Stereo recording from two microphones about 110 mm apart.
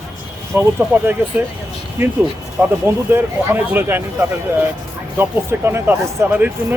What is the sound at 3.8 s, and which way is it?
Speech, 20° right (ahead or behind).